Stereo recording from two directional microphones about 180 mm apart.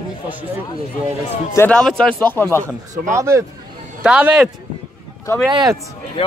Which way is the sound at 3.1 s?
15° right (ahead or behind).